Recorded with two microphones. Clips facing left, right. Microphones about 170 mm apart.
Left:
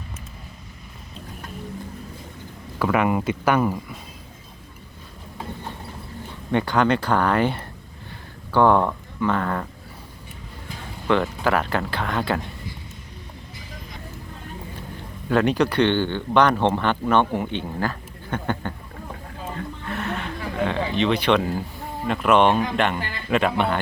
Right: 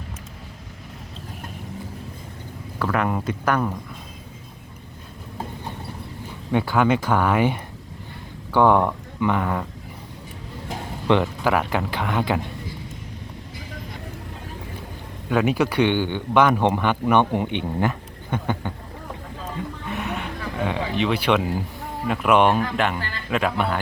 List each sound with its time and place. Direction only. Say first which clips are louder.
2.7 s speech: left 3 dB; 5° left (ahead or behind)
6.5 s a man's voice: even; 5° right (ahead or behind)
11.1 s a man's voice: right 1 dB; 15° right (ahead or behind)
15.3 s a man's voice: left 1 dB; 5° right (ahead or behind)
19.5 s music: right 1 dB; 15° right (ahead or behind)
22.0 s a man's voice: even; 5° right (ahead or behind)